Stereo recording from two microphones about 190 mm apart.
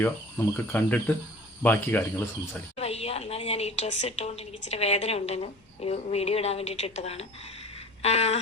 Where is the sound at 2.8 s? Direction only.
35° left (ahead or behind).